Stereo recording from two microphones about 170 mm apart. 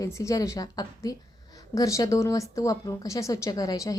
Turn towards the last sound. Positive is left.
turn(degrees=20)  # may be behind; listen again after turning